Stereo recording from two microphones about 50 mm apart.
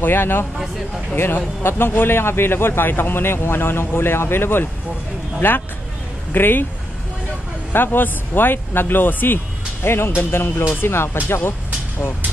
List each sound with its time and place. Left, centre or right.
0.0 s speech: left
7.7 s speech: left